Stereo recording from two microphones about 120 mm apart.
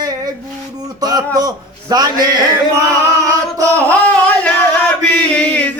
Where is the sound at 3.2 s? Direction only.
25° right (ahead or behind).